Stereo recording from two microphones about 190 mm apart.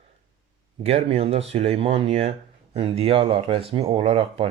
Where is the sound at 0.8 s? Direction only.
30° right (ahead or behind).